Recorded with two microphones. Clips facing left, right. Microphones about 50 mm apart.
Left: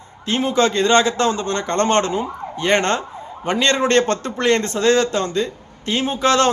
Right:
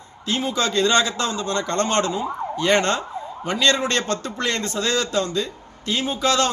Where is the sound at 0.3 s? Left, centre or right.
Left.